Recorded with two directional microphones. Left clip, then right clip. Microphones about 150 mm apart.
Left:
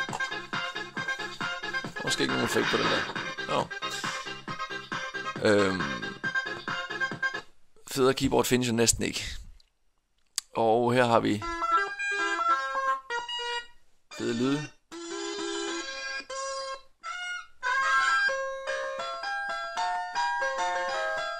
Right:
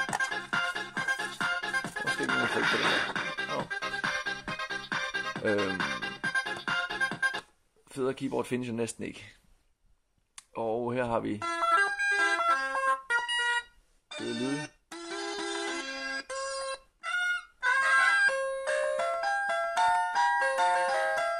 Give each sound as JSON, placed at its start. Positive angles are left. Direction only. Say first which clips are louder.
{"t": 0.0, "sound": "music", "louder": "right 1 dB", "side_deg": -30}
{"t": 5.4, "sound": "music", "louder": "left 7 dB", "side_deg": 20}
{"t": 5.8, "sound": "music", "louder": "even", "side_deg": -30}
{"t": 7.9, "sound": "speech", "louder": "left 7 dB", "side_deg": 20}
{"t": 10.3, "sound": "speech", "louder": "left 8 dB", "side_deg": 25}
{"t": 11.4, "sound": "music", "louder": "right 1 dB", "side_deg": -30}
{"t": 14.2, "sound": "speech", "louder": "left 5 dB", "side_deg": 20}
{"t": 14.6, "sound": "music", "louder": "even", "side_deg": -30}